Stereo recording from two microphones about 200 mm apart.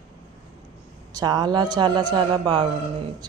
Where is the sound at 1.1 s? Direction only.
20° right (ahead or behind).